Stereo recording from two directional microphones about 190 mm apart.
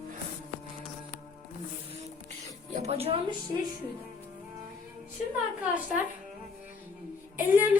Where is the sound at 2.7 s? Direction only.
35° right (ahead or behind).